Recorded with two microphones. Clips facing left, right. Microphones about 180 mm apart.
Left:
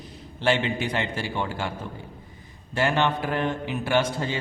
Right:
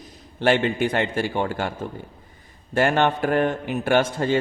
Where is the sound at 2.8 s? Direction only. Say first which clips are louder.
Right 4 dB; 50° right (ahead or behind).